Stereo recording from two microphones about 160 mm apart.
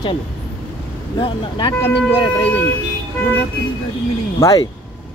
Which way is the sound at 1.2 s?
35° left (ahead or behind).